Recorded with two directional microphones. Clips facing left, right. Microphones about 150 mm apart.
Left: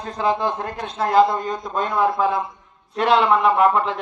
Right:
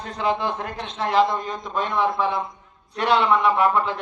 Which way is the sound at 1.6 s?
Centre (ahead or behind).